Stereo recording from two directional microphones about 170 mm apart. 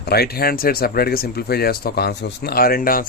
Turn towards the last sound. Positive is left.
turn(degrees=55)  # may be behind; listen again after turning